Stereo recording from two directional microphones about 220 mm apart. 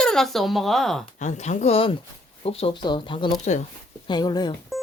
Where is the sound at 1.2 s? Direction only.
35° left (ahead or behind).